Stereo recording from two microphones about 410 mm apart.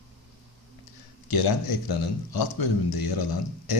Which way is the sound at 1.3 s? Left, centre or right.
Left.